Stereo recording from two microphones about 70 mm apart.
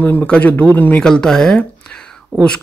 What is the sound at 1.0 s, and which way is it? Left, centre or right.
Speech, centre.